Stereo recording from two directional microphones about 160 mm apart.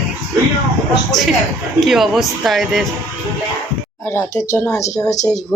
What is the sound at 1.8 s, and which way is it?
Speech, centre (ahead or behind).